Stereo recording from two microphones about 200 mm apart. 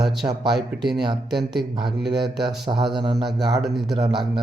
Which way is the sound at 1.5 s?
20° right (ahead or behind).